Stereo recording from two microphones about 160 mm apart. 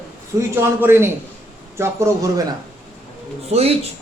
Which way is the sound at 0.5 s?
15° right (ahead or behind).